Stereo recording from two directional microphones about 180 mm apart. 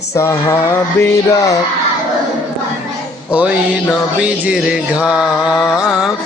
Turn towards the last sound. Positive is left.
turn(degrees=-5)  # may be behind; listen again after turning